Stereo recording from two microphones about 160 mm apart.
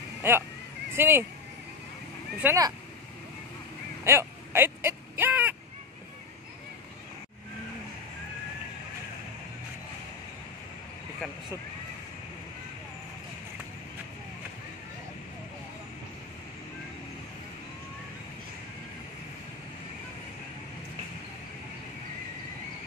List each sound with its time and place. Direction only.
0.2 s speech: 15° right (ahead or behind)
2.4 s speech: 20° right (ahead or behind)
4.0 s speech: 15° right (ahead or behind)